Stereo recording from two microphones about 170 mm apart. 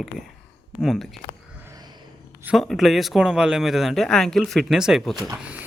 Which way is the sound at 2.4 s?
Centre (ahead or behind).